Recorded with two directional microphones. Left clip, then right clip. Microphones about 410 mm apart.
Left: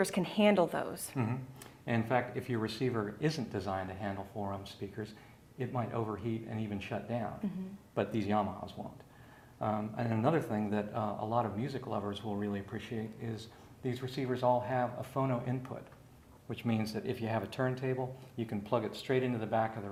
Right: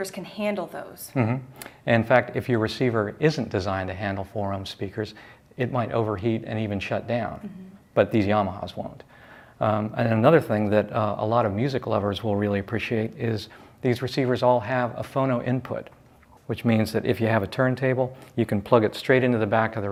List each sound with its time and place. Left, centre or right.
0.1 s speech: left
1.1 s speech: right
13.8 s speech: right